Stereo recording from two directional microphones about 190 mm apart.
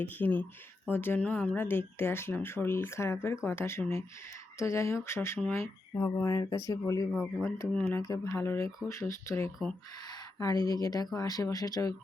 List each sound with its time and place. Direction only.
0.0 s speech: 10° left (ahead or behind)
7.1 s speech: 5° left (ahead or behind)
7.9 s speech: 20° left (ahead or behind)